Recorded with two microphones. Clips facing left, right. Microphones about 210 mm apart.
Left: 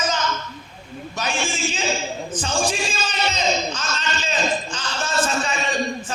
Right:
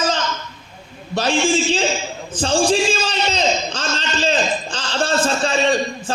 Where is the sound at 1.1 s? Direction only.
30° right (ahead or behind).